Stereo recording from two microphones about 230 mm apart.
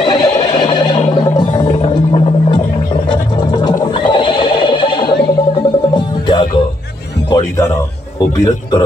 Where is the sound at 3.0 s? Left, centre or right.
Centre.